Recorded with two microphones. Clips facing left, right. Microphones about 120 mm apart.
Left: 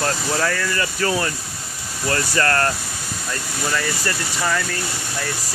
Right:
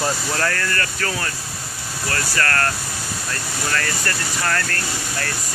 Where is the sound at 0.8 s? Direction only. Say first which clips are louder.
Left 4 dB; 20° left (ahead or behind).